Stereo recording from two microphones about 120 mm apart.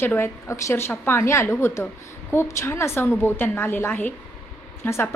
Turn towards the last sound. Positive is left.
turn(degrees=20)  # may be behind; listen again after turning